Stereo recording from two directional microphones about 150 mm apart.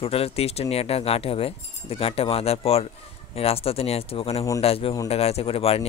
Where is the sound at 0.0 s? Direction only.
40° left (ahead or behind).